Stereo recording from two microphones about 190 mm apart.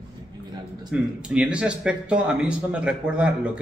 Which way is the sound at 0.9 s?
5° right (ahead or behind).